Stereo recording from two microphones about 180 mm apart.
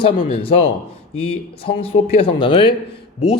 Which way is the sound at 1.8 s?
35° left (ahead or behind).